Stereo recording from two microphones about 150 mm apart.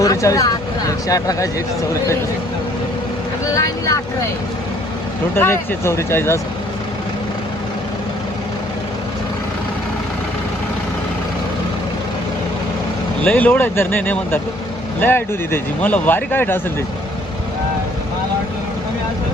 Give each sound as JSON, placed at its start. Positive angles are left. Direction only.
{"t": 0.0, "sound": "speech", "side_deg": 20}
{"t": 3.5, "sound": "vehicle", "side_deg": 20}
{"t": 5.3, "sound": "speech", "side_deg": 15}
{"t": 13.2, "sound": "speech", "side_deg": 10}